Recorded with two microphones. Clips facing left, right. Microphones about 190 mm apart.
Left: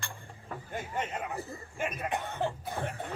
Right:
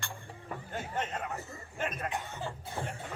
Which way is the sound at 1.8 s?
10° left (ahead or behind).